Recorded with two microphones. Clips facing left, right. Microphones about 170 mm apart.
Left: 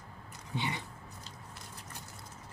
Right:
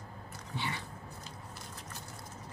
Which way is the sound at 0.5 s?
20° left (ahead or behind).